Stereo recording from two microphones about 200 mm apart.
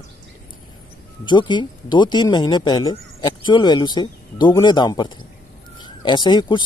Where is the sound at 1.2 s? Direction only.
25° left (ahead or behind).